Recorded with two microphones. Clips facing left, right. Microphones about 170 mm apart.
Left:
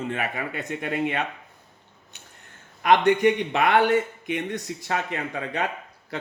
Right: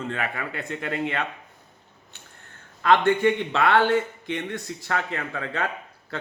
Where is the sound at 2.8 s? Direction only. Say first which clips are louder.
Left 1 dB; 15° left (ahead or behind).